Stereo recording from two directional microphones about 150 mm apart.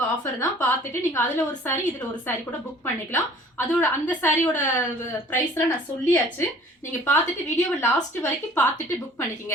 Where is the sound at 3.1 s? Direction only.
15° left (ahead or behind).